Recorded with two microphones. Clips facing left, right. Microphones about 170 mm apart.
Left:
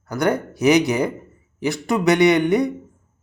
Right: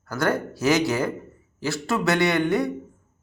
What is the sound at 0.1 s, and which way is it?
Speech, 15° left (ahead or behind).